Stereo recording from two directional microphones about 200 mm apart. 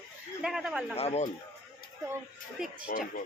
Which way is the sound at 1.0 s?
35° left (ahead or behind).